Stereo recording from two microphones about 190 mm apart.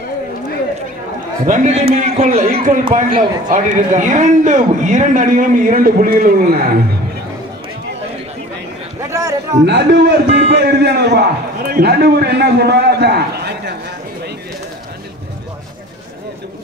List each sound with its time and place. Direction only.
1.4 s a man's voice: 40° right (ahead or behind)
9.1 s a sound: 15° right (ahead or behind)
9.7 s a man's voice: 60° right (ahead or behind)